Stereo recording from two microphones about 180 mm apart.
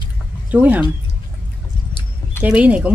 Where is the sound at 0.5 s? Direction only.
10° right (ahead or behind).